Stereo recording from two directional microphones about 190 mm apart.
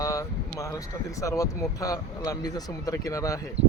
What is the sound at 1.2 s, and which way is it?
Speech, 15° left (ahead or behind).